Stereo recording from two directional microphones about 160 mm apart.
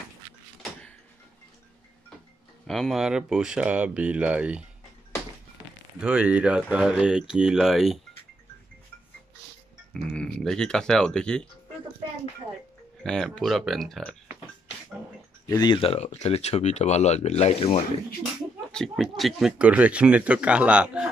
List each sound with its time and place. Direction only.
0.6 s vehicle: 5° left (ahead or behind)
2.6 s speech: centre (ahead or behind)
5.9 s speech: 5° right (ahead or behind)
10.1 s speech: 5° left (ahead or behind)
13.0 s speech: 5° left (ahead or behind)
15.4 s speech: 25° left (ahead or behind); by 17.8 s 40° left (ahead or behind)
18.7 s speech: 5° left (ahead or behind)